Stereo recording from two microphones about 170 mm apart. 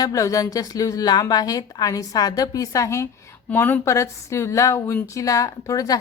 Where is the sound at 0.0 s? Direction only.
20° left (ahead or behind).